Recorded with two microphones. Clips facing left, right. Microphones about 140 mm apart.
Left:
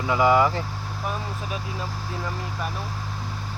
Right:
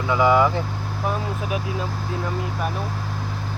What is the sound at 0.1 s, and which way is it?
Speech, 5° left (ahead or behind).